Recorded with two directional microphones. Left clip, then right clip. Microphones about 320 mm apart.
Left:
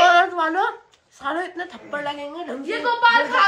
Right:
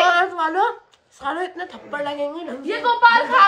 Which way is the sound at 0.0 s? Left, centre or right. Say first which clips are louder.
Left 2 dB; centre.